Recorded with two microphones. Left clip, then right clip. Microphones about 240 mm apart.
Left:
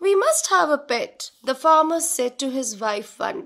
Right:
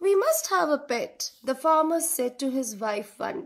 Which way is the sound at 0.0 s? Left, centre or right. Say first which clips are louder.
Left 4 dB; left.